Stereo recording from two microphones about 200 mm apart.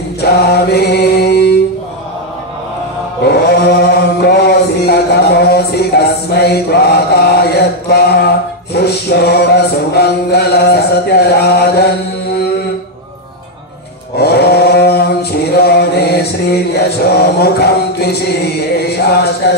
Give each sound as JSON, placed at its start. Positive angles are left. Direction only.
{"t": 0.2, "sound": "mantra", "side_deg": 55}
{"t": 3.3, "sound": "mantra", "side_deg": 50}
{"t": 4.2, "sound": "music", "side_deg": 55}
{"t": 14.1, "sound": "chant", "side_deg": 55}
{"t": 19.4, "sound": "speech", "side_deg": 55}